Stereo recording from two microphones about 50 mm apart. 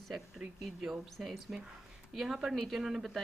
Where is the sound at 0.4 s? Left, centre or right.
Centre.